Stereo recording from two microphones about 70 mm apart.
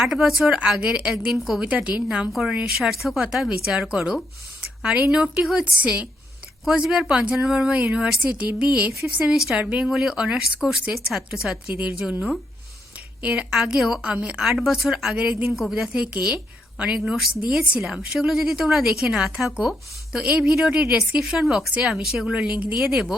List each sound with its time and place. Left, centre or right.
0.0 s a woman's voice: centre
1.6 s a woman's voice: centre
2.7 s a woman's voice: centre
9.3 s a woman's voice: centre
10.6 s a woman's voice: right
10.9 s a woman's voice: centre
13.5 s a woman's voice: centre
15.1 s a woman's voice: centre
15.5 s a woman's voice: centre
17.2 s a woman's voice: centre
22.3 s a woman's voice: centre
22.9 s a woman's voice: centre